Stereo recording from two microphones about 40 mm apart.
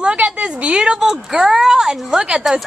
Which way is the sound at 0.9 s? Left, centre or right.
Centre.